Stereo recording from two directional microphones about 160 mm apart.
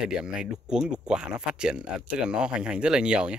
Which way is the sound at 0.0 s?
5° right (ahead or behind).